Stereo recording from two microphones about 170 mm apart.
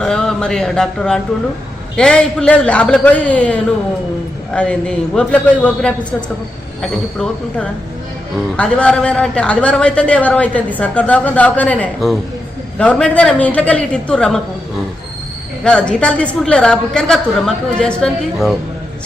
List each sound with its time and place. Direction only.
0.0 s a woman's voice: 5° left (ahead or behind)
15.6 s a woman's voice: 5° left (ahead or behind)